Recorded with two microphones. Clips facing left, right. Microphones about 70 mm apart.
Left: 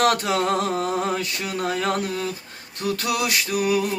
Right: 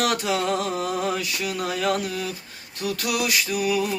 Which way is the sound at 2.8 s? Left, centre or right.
Left.